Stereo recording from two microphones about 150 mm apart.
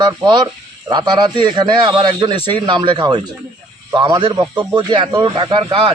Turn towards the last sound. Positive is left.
turn(degrees=-35)  # may be behind; listen again after turning